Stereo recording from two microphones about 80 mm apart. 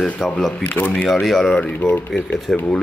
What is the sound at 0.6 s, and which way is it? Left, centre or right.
Speech, centre.